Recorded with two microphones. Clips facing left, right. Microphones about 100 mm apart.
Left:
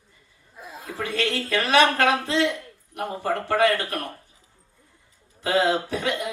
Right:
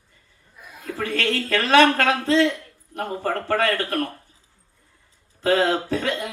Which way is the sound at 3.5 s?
15° left (ahead or behind).